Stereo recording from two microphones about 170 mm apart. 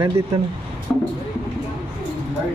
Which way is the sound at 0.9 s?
5° left (ahead or behind).